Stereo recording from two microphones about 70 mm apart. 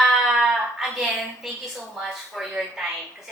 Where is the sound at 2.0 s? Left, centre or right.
Centre.